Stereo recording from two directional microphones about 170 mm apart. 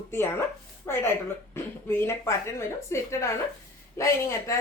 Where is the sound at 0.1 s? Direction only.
15° left (ahead or behind).